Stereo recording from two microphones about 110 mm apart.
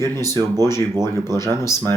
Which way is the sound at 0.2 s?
35° right (ahead or behind).